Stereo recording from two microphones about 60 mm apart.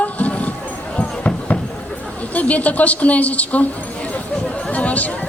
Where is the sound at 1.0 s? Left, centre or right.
Left.